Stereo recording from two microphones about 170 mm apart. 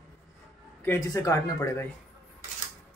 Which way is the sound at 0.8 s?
15° left (ahead or behind).